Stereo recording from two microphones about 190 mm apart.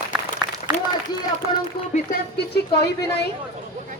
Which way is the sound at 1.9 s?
55° left (ahead or behind).